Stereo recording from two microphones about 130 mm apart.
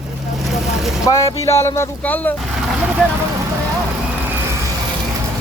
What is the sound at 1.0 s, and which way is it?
Speech, 25° left (ahead or behind).